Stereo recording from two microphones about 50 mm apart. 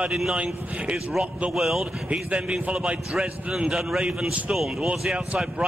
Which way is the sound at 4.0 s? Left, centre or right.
Centre.